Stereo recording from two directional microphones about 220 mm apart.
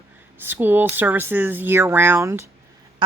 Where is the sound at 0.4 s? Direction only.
10° right (ahead or behind).